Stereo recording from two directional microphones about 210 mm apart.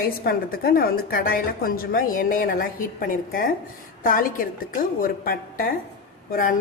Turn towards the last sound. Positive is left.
turn(degrees=40)  # may be behind; listen again after turning